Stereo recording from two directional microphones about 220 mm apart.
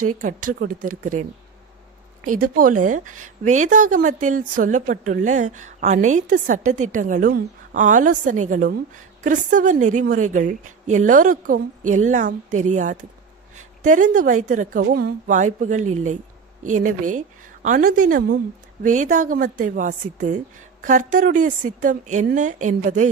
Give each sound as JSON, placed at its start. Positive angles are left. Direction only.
{"t": 0.0, "sound": "a woman's voice", "side_deg": -35}
{"t": 2.3, "sound": "a woman's voice", "side_deg": -40}